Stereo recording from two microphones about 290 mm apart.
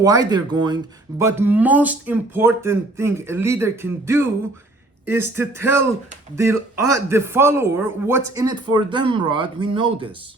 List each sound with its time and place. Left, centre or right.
0.0 s speech: centre
5.4 s speech: centre